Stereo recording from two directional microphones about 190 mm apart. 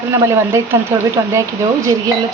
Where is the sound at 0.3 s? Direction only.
15° right (ahead or behind).